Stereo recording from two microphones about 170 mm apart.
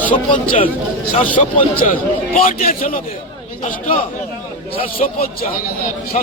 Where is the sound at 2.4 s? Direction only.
55° left (ahead or behind).